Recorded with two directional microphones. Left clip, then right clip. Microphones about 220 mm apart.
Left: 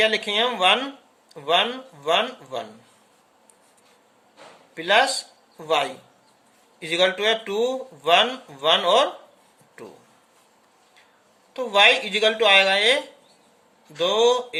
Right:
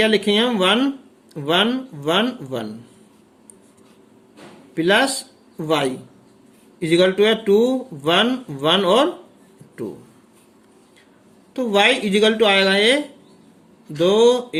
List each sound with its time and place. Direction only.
0.0 s speech: 15° right (ahead or behind)
4.7 s speech: 15° right (ahead or behind)
11.5 s speech: 10° right (ahead or behind)
14.0 s speech: 15° right (ahead or behind)